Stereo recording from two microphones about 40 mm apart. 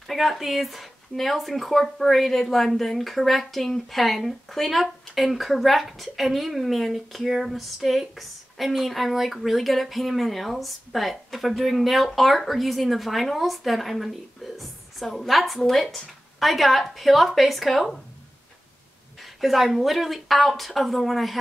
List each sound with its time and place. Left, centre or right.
0.0 s speech: centre
19.4 s speech: centre